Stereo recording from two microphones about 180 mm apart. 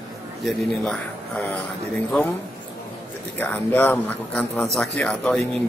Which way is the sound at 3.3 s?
10° left (ahead or behind).